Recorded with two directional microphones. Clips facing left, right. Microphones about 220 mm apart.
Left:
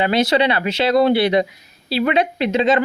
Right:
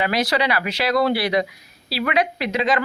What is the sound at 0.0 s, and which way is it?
Speech, 25° left (ahead or behind).